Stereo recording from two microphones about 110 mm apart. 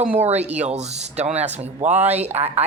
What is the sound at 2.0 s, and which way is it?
Speech, 75° right (ahead or behind).